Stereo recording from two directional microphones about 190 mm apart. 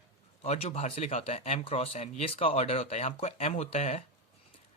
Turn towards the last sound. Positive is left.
turn(degrees=35)  # may be behind; listen again after turning